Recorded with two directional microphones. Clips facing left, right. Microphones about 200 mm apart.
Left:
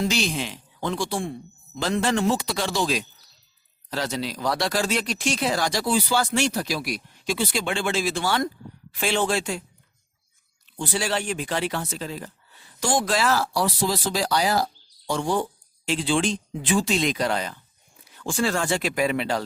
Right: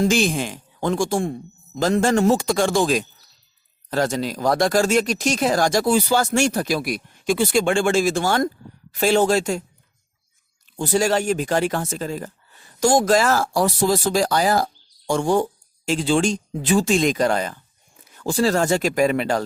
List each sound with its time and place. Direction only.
0.0 s speech: 50° right (ahead or behind)
10.8 s speech: 45° right (ahead or behind)